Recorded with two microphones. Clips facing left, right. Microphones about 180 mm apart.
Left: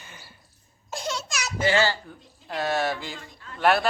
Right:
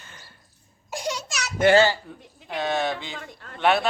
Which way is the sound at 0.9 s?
15° right (ahead or behind).